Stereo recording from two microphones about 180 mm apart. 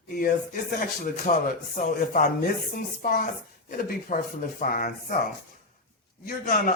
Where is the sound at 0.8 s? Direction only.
50° left (ahead or behind).